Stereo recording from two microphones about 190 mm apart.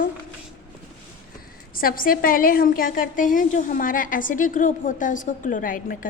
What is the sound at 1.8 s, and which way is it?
A woman's voice, 50° left (ahead or behind).